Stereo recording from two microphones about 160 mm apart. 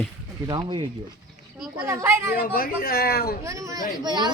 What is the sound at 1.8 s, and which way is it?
Speech, 15° right (ahead or behind).